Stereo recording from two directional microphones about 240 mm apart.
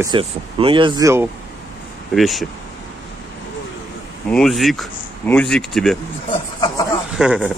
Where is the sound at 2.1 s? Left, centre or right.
Centre.